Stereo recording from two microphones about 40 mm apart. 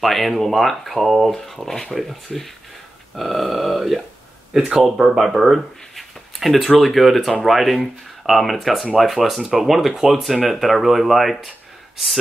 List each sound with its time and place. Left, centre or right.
0.0 s speech: centre
10.6 s speech: centre